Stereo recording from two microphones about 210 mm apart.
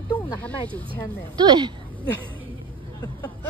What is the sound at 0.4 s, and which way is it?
Speech, 5° left (ahead or behind).